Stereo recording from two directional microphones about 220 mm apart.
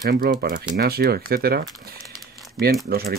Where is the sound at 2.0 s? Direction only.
Centre (ahead or behind).